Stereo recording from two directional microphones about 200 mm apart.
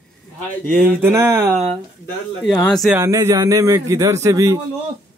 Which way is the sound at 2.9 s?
15° right (ahead or behind).